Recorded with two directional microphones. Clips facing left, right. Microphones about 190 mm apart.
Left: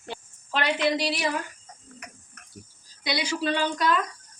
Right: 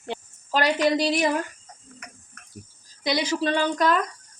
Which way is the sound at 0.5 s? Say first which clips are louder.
Right 4 dB; 40° right (ahead or behind).